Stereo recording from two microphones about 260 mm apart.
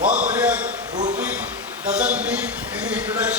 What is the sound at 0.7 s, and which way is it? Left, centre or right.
Speech, right.